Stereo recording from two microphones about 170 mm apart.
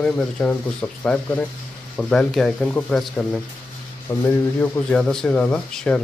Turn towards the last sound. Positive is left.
turn(degrees=5)  # may be behind; listen again after turning